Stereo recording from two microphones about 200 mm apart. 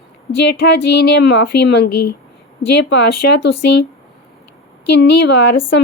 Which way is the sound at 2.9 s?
60° left (ahead or behind).